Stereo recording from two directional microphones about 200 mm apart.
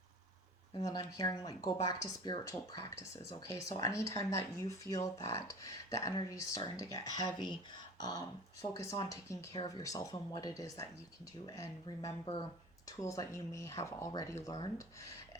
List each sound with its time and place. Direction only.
0.7 s speech: 20° left (ahead or behind)
8.6 s speech: 15° left (ahead or behind)